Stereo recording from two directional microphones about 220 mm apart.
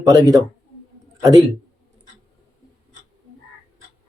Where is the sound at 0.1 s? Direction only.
15° right (ahead or behind).